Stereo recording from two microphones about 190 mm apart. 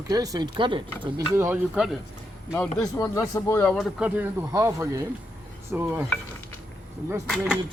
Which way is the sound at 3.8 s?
5° right (ahead or behind).